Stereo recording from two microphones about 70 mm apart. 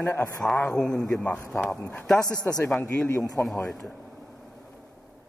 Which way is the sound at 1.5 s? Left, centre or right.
Left.